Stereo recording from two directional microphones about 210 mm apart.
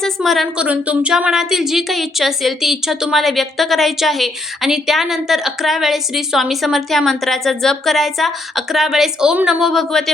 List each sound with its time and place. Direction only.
0.0 s speech: centre (ahead or behind)